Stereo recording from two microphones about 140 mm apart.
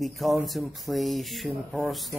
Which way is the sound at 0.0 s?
Centre (ahead or behind).